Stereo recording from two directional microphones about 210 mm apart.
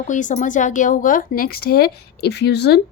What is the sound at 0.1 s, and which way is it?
Speech, 35° left (ahead or behind).